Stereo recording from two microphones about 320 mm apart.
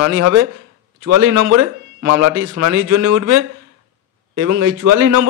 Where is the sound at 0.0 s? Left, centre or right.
Right.